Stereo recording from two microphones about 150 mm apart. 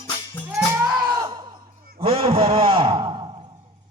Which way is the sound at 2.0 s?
40° right (ahead or behind).